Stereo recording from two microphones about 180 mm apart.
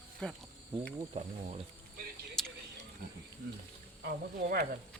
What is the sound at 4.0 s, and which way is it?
Speech, 60° right (ahead or behind).